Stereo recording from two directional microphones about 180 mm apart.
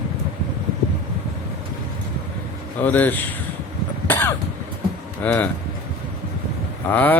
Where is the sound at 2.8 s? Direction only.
10° left (ahead or behind).